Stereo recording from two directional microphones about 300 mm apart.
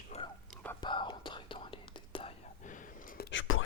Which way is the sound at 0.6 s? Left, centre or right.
Centre.